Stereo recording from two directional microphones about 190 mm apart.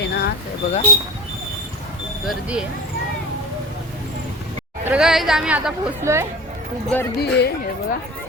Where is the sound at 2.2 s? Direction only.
5° right (ahead or behind).